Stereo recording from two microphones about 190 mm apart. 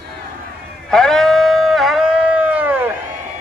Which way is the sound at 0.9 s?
5° left (ahead or behind).